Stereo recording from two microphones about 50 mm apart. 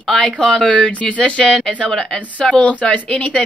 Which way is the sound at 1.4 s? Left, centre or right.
Centre.